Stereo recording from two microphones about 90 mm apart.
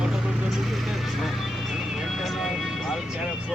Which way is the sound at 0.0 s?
5° right (ahead or behind).